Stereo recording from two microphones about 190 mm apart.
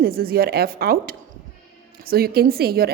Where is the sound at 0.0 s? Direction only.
50° right (ahead or behind).